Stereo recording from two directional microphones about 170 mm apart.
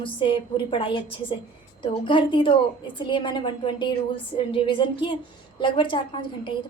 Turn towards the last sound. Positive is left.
turn(degrees=30)  # may be behind; listen again after turning